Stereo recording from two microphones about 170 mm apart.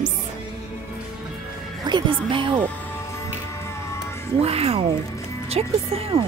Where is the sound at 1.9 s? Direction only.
30° right (ahead or behind).